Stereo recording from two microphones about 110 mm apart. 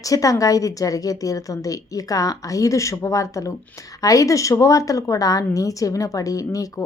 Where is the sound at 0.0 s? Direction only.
30° left (ahead or behind).